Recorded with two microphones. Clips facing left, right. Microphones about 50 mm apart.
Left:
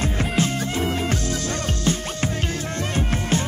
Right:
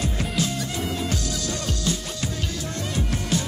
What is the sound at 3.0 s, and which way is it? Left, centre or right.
Music, left.